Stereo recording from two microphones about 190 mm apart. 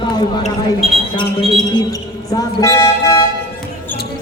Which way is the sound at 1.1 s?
25° left (ahead or behind).